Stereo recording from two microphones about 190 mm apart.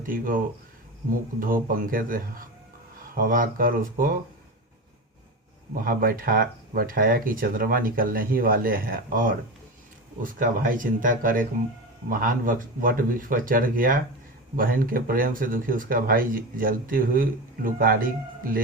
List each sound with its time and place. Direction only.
0.0 s speech: 45° right (ahead or behind)
1.4 s speech: 50° right (ahead or behind)
5.7 s speech: 50° right (ahead or behind)
10.3 s speech: 45° right (ahead or behind)